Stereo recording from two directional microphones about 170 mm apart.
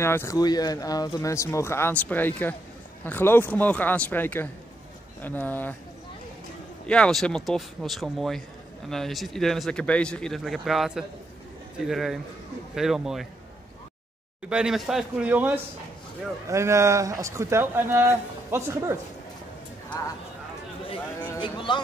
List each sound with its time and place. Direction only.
0.0 s speech: 15° left (ahead or behind)
6.9 s speech: 5° left (ahead or behind)
14.5 s a man's voice: 5° right (ahead or behind)
21.4 s a sound: 25° left (ahead or behind)